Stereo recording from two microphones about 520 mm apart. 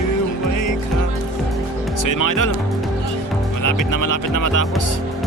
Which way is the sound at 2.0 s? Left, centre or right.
Left.